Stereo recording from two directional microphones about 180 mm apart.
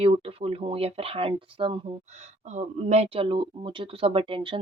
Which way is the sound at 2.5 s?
40° right (ahead or behind).